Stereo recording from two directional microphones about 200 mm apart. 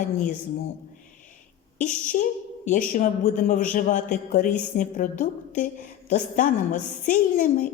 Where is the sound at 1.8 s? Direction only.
40° left (ahead or behind).